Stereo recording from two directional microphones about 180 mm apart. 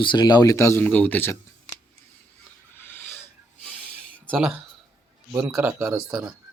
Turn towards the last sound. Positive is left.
turn(degrees=-5)  # may be behind; listen again after turning